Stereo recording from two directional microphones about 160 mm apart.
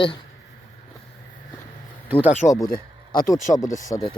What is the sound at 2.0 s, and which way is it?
Speech, 10° right (ahead or behind).